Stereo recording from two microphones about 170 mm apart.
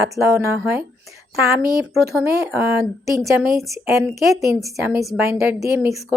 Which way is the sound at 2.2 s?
15° right (ahead or behind).